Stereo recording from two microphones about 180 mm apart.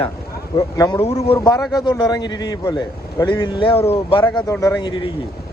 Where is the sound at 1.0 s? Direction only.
35° left (ahead or behind).